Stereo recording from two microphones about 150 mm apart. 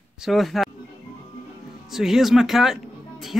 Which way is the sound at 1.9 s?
Centre (ahead or behind).